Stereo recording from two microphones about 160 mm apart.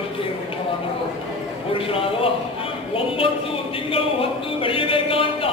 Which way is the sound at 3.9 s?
35° left (ahead or behind).